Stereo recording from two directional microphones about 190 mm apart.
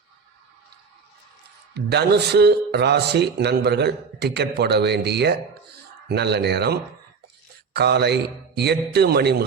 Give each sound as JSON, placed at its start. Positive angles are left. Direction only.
{"t": 1.7, "sound": "speech", "side_deg": -60}